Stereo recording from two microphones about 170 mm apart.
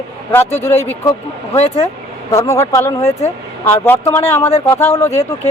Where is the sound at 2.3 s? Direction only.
20° left (ahead or behind).